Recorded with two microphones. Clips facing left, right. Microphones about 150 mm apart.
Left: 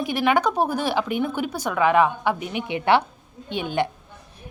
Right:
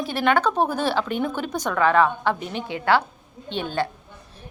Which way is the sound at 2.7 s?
20° left (ahead or behind).